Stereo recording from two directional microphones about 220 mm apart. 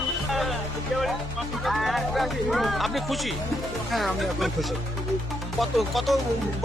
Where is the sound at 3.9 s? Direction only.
Centre (ahead or behind).